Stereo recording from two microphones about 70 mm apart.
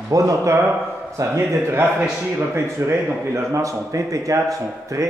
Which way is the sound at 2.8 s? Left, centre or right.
Right.